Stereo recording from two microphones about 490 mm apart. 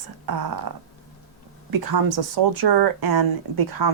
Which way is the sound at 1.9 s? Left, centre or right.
Right.